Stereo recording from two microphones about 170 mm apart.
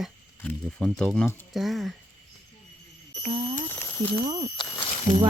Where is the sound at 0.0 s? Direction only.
5° left (ahead or behind).